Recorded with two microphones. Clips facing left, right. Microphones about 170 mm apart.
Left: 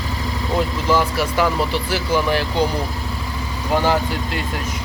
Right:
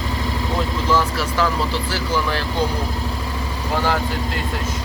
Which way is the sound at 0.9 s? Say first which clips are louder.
Left 2 dB; 15° left (ahead or behind).